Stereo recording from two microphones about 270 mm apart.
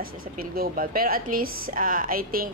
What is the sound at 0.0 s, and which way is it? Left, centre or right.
A woman's voice, right.